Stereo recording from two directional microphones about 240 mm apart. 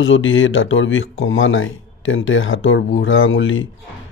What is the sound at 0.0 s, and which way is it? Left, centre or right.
Speech, left.